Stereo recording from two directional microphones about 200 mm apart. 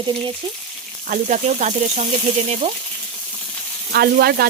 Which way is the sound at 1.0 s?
40° right (ahead or behind).